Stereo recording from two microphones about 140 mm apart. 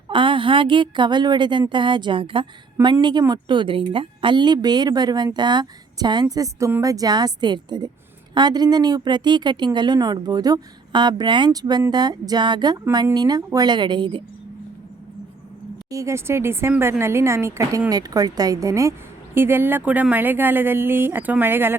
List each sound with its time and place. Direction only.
0.1 s speech: 35° right (ahead or behind)
15.9 s speech: 20° right (ahead or behind)